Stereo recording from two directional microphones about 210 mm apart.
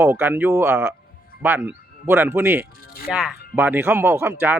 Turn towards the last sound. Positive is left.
turn(degrees=-10)  # may be behind; listen again after turning